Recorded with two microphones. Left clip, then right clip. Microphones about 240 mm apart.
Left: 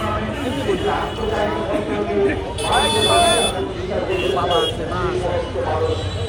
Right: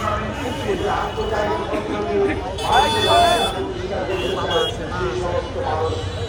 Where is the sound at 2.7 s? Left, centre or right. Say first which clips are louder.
Right 1 dB; right.